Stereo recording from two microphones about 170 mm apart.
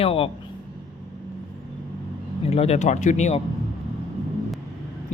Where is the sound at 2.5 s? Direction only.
40° left (ahead or behind).